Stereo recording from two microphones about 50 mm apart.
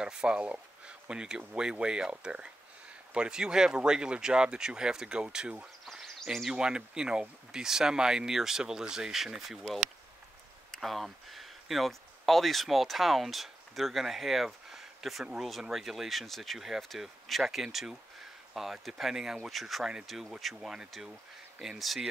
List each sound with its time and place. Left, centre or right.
0.0 s speech: centre
6.5 s speech: centre
10.7 s speech: centre